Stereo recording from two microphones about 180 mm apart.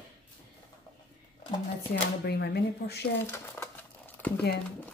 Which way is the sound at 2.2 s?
65° left (ahead or behind).